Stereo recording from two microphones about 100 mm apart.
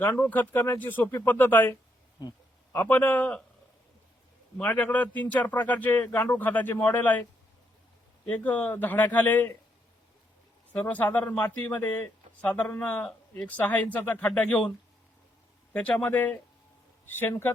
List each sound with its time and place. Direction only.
0.2 s speech: 20° left (ahead or behind)
2.7 s speech: 20° left (ahead or behind)
4.5 s speech: 15° left (ahead or behind)
8.3 s speech: 15° left (ahead or behind)
10.7 s speech: 20° left (ahead or behind)
15.7 s speech: 15° left (ahead or behind)